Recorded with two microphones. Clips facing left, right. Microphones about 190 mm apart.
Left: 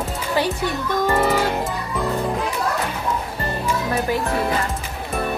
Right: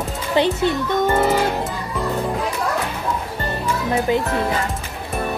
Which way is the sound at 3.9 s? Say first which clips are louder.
Right 5 dB; 20° right (ahead or behind).